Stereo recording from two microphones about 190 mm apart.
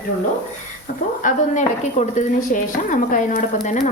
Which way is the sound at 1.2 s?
40° left (ahead or behind).